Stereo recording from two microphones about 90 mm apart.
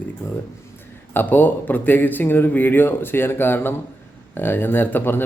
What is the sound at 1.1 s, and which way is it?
A man's voice, 20° left (ahead or behind).